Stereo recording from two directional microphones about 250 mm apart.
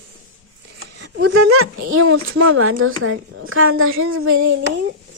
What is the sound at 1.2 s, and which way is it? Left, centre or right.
Speech, right.